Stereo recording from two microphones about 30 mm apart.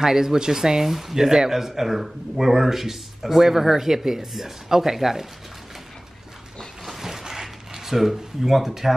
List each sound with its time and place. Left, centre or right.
0.0 s speech: centre
6.9 s a sound: centre
7.8 s speech: centre